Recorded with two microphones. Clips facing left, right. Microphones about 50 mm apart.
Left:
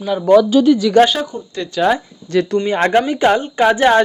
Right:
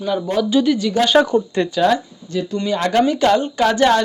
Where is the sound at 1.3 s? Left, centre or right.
Right.